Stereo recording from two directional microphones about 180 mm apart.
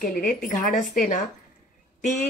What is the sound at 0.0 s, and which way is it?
Speech, 50° left (ahead or behind).